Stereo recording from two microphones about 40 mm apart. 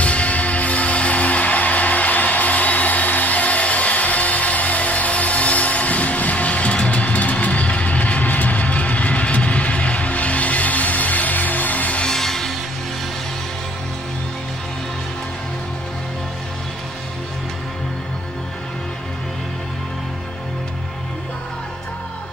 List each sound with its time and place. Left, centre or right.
0.0 s music: left
12.1 s music: centre